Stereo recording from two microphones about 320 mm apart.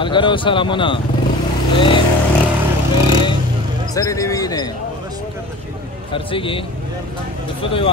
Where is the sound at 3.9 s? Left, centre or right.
Centre.